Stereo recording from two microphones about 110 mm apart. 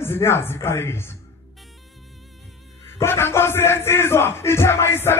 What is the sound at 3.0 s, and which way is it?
Music, 20° left (ahead or behind).